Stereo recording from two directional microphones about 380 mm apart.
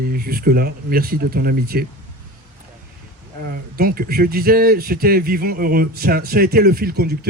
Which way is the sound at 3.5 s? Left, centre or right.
Right.